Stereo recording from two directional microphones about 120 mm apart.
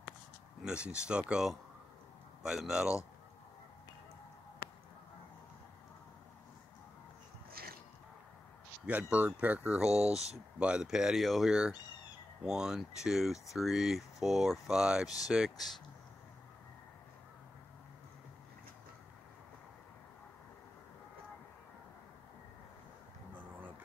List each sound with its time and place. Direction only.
0.7 s speech: 10° right (ahead or behind)
8.8 s speech: 10° right (ahead or behind)
9.8 s speech: 65° right (ahead or behind)
10.1 s speech: 5° right (ahead or behind)